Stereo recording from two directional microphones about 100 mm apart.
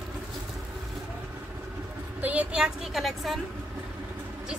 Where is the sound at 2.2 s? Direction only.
10° right (ahead or behind).